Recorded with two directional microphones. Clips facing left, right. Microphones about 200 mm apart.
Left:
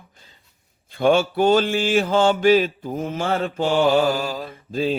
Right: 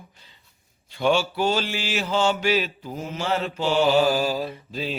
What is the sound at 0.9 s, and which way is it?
Mantra, 50° left (ahead or behind).